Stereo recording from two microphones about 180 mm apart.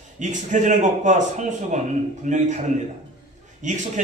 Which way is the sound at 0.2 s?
45° right (ahead or behind).